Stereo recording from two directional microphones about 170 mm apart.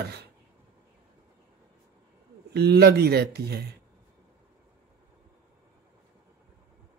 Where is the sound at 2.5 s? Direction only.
70° right (ahead or behind).